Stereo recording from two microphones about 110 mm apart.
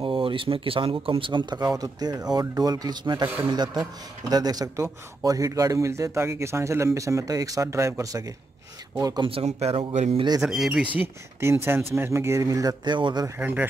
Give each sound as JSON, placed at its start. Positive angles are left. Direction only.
{"t": 0.0, "sound": "speech", "side_deg": -50}
{"t": 9.3, "sound": "speech", "side_deg": -70}
{"t": 9.9, "sound": "a man's voice", "side_deg": -90}
{"t": 10.4, "sound": "speech", "side_deg": -5}
{"t": 11.0, "sound": "speech", "side_deg": -20}
{"t": 13.4, "sound": "speech", "side_deg": -15}